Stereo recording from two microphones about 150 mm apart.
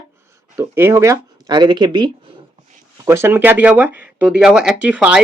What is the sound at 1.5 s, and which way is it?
Speech, 30° right (ahead or behind).